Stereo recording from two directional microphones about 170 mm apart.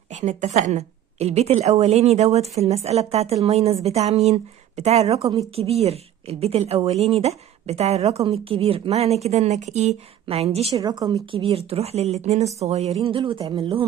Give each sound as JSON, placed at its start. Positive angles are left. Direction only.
{"t": 0.1, "sound": "a woman's voice", "side_deg": -45}
{"t": 10.8, "sound": "a woman's voice", "side_deg": -25}